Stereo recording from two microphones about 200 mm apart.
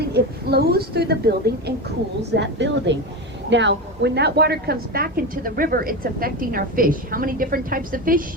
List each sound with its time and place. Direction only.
0.1 s a woman's voice: 50° right (ahead or behind)